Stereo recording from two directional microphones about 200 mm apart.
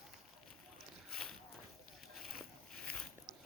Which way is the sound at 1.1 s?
5° left (ahead or behind).